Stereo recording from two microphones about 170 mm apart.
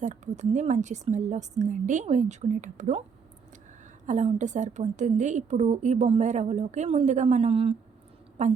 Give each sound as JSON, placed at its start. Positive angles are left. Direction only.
{"t": 0.0, "sound": "a woman's voice", "side_deg": -45}
{"t": 4.0, "sound": "a woman's voice", "side_deg": -45}